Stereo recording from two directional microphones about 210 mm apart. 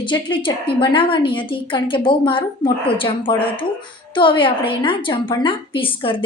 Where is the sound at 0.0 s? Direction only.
25° left (ahead or behind).